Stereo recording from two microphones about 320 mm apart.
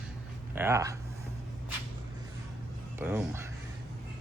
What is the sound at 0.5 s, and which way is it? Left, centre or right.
Speech, centre.